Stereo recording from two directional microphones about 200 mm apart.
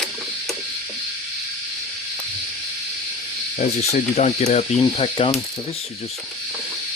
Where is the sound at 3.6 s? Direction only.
35° left (ahead or behind).